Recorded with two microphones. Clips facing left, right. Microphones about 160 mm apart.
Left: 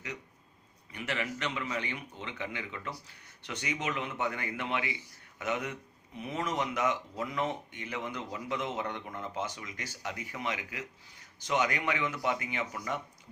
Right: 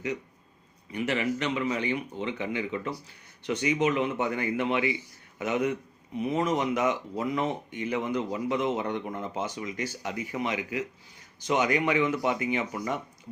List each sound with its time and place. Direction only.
0.9 s speech: 20° right (ahead or behind)